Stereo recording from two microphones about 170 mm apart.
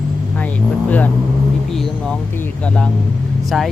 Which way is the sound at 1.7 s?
Centre (ahead or behind).